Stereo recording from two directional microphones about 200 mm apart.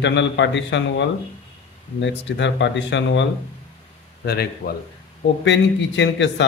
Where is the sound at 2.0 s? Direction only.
65° left (ahead or behind).